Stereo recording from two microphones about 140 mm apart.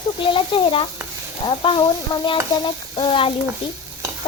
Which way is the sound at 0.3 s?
40° left (ahead or behind).